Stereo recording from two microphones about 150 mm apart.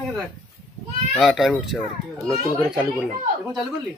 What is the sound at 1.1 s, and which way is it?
Speech, centre (ahead or behind).